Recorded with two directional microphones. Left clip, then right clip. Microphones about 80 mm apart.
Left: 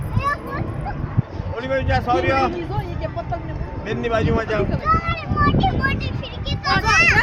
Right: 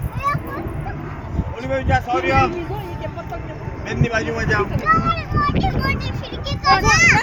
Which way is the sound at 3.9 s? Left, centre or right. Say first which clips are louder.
Left 1 dB; centre.